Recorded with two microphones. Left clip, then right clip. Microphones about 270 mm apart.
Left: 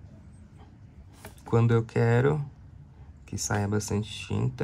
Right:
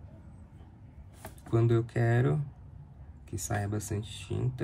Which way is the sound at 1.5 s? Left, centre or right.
Left.